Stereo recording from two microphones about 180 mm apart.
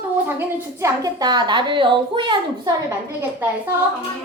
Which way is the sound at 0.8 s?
20° right (ahead or behind).